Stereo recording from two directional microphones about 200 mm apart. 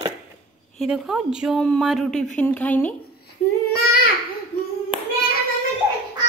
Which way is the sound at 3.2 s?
50° left (ahead or behind).